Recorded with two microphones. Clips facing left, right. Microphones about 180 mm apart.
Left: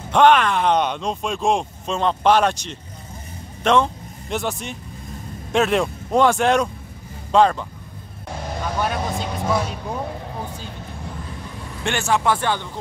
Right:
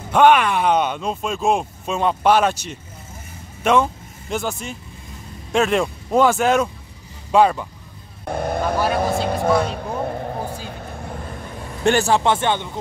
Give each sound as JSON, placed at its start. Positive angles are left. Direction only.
{"t": 0.1, "sound": "a man's voice", "side_deg": -10}
{"t": 8.3, "sound": "speech", "side_deg": -55}
{"t": 11.8, "sound": "speech", "side_deg": -35}